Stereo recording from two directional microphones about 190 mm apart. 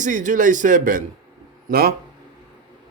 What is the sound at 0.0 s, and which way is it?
Speech, 40° right (ahead or behind).